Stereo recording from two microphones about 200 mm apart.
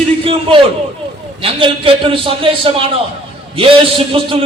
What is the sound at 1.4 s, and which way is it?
A man's voice, 25° right (ahead or behind).